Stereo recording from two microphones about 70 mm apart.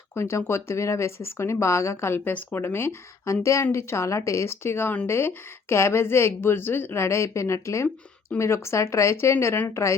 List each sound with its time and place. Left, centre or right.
0.1 s speech: left
3.4 s speech: left